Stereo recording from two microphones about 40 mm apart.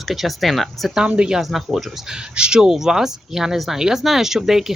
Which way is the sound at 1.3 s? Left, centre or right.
Centre.